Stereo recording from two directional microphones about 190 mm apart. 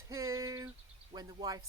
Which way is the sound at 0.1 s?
15° right (ahead or behind).